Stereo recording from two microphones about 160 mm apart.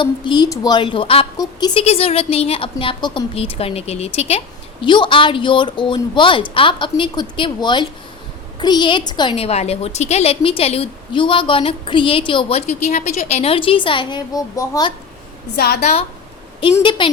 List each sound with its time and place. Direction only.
0.0 s a woman's voice: 30° left (ahead or behind)
1.8 s a woman's voice: 40° left (ahead or behind); by 14.9 s 25° left (ahead or behind)
15.5 s a woman's voice: 85° left
15.8 s a woman's voice: 40° left (ahead or behind)
17.0 s a woman's voice: 30° left (ahead or behind)